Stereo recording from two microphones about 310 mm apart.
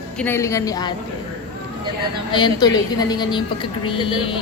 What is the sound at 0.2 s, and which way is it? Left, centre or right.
Speech, centre.